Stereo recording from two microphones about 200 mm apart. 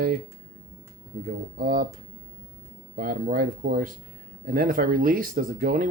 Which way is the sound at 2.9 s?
45° right (ahead or behind).